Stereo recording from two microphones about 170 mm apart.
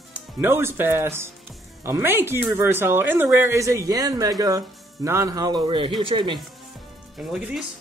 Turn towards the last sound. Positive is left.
turn(degrees=-5)  # may be behind; listen again after turning